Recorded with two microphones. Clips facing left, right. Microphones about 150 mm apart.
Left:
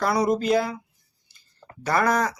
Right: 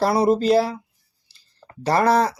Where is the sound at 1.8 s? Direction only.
30° right (ahead or behind).